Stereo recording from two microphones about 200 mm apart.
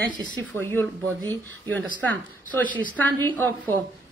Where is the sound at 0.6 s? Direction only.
10° left (ahead or behind).